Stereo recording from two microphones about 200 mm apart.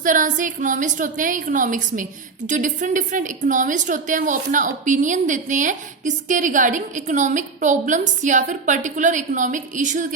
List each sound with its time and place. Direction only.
0.0 s a woman's voice: 40° right (ahead or behind)